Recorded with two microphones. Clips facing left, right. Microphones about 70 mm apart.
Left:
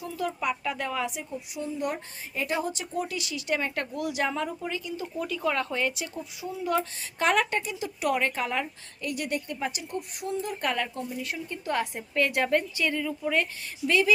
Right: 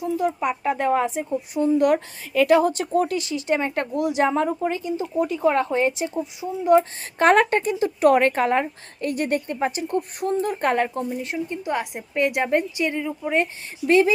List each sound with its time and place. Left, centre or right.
0.0 s speech: right
1.8 s a woman's voice: right
3.2 s speech: right
7.2 s speech: right